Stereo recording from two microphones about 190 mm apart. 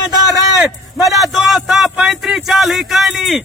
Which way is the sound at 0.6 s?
Centre (ahead or behind).